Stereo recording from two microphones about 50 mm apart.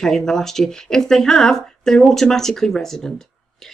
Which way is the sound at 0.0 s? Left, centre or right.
Centre.